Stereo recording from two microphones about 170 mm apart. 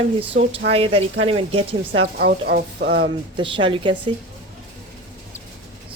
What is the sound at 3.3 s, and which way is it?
Speech, 30° right (ahead or behind).